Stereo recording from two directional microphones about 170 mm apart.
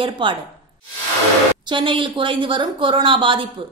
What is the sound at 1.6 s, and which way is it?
A woman's voice, 30° right (ahead or behind).